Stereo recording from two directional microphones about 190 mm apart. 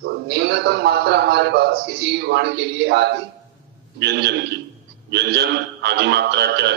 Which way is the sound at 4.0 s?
60° right (ahead or behind).